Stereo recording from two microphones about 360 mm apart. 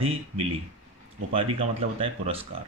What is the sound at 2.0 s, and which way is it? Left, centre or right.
Speech, centre.